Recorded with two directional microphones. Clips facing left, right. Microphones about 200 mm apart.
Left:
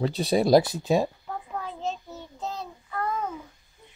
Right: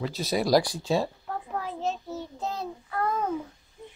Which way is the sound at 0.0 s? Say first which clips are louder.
Left 4 dB; 30° left (ahead or behind).